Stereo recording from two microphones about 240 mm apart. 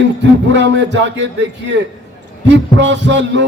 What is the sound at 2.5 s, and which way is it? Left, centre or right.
Speech, right.